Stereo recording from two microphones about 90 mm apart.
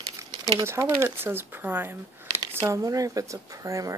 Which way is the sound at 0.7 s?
30° right (ahead or behind).